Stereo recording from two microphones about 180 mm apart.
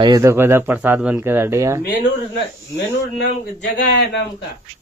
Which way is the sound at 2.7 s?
70° left (ahead or behind).